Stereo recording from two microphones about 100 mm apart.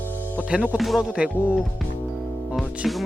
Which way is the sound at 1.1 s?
10° right (ahead or behind).